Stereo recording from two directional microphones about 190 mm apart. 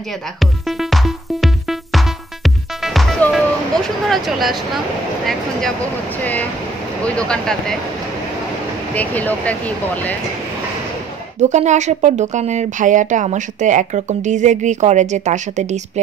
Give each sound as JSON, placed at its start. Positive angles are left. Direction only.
{"t": 0.4, "sound": "music", "side_deg": 0}
{"t": 5.2, "sound": "speech", "side_deg": 0}
{"t": 8.9, "sound": "speech", "side_deg": 10}
{"t": 11.4, "sound": "speech", "side_deg": -40}